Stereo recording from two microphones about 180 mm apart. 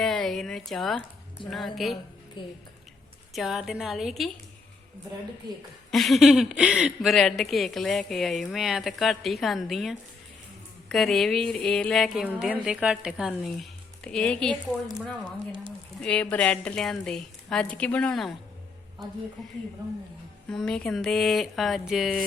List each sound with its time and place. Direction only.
0.0 s a sound: centre (ahead or behind)
1.5 s speech: centre (ahead or behind)
2.4 s speech: 25° left (ahead or behind)
3.3 s speech: centre (ahead or behind)
5.9 s speech: centre (ahead or behind)
20.5 s speech: 5° left (ahead or behind)